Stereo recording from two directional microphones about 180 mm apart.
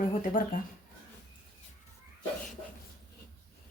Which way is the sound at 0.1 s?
45° left (ahead or behind).